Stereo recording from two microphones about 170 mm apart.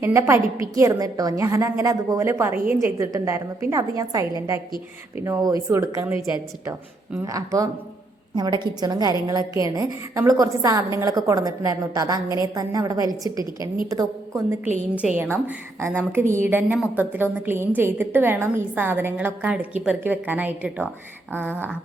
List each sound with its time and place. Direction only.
0.0 s a woman's voice: 15° right (ahead or behind)
7.3 s a woman's voice: 20° right (ahead or behind)
15.0 s a woman's voice: 10° right (ahead or behind)